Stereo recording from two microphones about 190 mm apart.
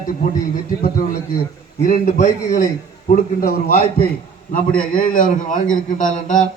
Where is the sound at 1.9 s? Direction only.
40° left (ahead or behind).